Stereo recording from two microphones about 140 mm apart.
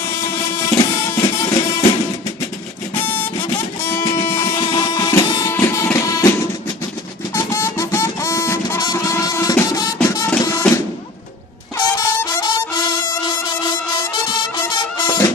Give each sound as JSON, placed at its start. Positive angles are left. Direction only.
{"t": 0.1, "sound": "music", "side_deg": 15}
{"t": 3.0, "sound": "vehicle", "side_deg": 15}
{"t": 4.1, "sound": "music", "side_deg": 15}
{"t": 4.6, "sound": "music", "side_deg": 30}
{"t": 7.3, "sound": "a sound", "side_deg": 20}
{"t": 10.0, "sound": "music", "side_deg": 20}
{"t": 11.8, "sound": "music", "side_deg": 30}